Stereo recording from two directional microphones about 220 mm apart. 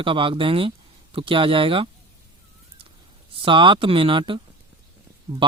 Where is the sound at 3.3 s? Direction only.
25° right (ahead or behind).